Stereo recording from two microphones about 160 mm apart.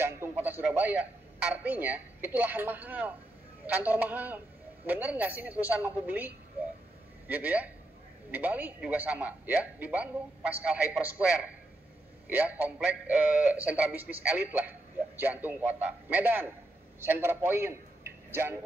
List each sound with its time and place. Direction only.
0.0 s a man's voice: 15° right (ahead or behind)